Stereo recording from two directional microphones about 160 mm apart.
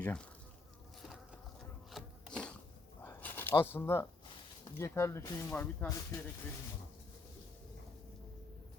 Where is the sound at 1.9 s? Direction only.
5° left (ahead or behind).